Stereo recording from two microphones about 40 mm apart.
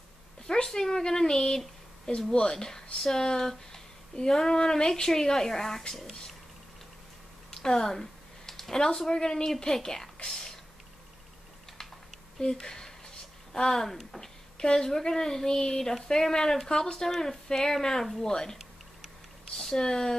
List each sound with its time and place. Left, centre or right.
0.7 s speech: centre
7.5 s speech: centre
10.2 s whispering: centre
12.4 s speech: centre
18.2 s a sound: centre
19.5 s speech: centre